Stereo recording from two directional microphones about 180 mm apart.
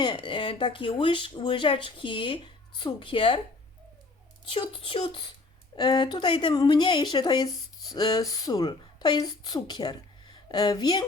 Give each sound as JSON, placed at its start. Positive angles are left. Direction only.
{"t": 0.0, "sound": "speech", "side_deg": 25}
{"t": 4.4, "sound": "speech", "side_deg": 30}